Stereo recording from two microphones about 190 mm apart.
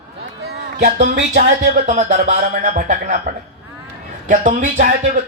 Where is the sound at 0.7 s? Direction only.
40° right (ahead or behind).